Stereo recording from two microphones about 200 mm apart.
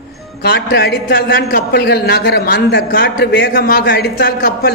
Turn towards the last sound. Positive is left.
turn(degrees=55)  # may be behind; listen again after turning